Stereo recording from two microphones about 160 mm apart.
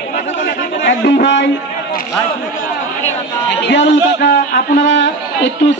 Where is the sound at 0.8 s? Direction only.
90° left.